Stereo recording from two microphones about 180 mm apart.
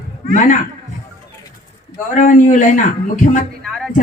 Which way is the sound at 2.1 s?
45° left (ahead or behind).